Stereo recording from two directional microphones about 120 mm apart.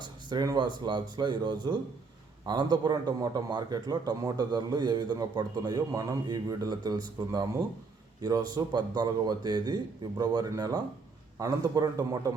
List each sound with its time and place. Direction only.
0.0 s a man's voice: 35° right (ahead or behind)